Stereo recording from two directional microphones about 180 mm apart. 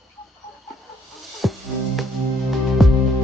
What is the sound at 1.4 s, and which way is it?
Music, centre (ahead or behind).